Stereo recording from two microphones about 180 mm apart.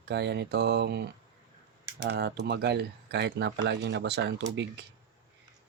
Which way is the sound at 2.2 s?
75° right (ahead or behind).